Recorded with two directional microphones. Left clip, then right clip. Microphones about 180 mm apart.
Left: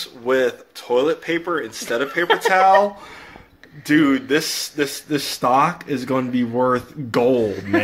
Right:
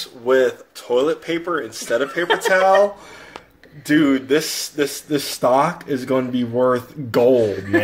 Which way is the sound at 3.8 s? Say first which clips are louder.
Even; centre (ahead or behind).